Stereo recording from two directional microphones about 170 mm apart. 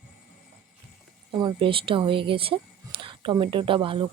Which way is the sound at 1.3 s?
25° right (ahead or behind).